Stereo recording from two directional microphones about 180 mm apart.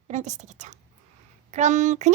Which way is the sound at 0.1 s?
40° right (ahead or behind).